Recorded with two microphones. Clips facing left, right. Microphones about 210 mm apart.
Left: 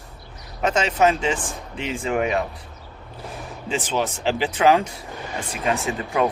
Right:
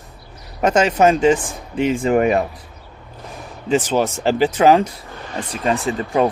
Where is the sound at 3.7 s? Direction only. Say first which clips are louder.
Right 7 dB; 45° right (ahead or behind).